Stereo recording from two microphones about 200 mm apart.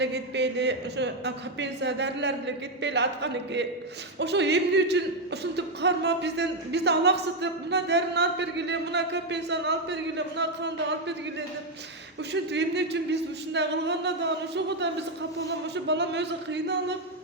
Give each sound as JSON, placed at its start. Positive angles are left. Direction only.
{"t": 0.0, "sound": "speech", "side_deg": -60}